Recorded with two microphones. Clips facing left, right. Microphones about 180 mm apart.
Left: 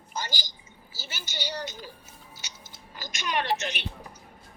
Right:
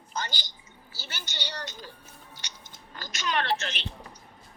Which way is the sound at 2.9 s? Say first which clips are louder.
Even; 10° left (ahead or behind).